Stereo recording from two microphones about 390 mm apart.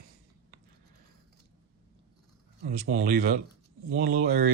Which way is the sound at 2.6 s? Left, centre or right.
Right.